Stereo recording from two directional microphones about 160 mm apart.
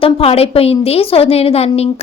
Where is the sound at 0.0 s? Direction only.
35° left (ahead or behind).